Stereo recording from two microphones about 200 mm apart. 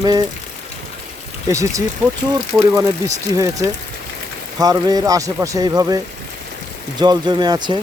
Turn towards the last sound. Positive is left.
turn(degrees=-20)  # may be behind; listen again after turning